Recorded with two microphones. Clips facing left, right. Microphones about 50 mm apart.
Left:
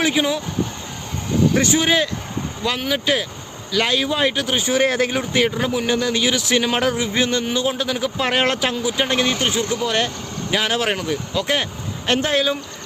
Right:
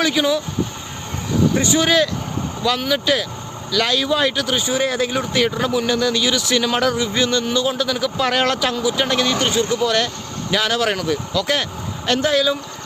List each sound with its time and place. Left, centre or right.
0.0 s a man's voice: left
1.8 s a man's voice: left
4.7 s speech: left
5.5 s a man's voice: left
12.0 s speech: left